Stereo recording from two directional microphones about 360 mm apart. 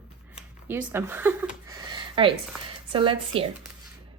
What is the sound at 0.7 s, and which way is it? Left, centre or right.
A woman's voice, centre.